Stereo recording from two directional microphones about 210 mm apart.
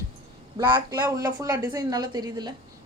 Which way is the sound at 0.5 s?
20° right (ahead or behind).